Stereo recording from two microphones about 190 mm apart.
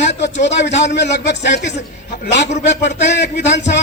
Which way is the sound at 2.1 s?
65° left (ahead or behind).